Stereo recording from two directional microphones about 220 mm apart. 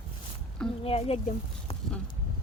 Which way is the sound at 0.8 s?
25° left (ahead or behind).